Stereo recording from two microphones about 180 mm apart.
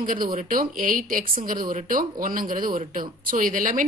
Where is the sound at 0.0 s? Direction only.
50° right (ahead or behind).